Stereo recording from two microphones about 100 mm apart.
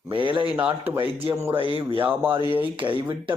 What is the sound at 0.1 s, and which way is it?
Speech, 55° right (ahead or behind).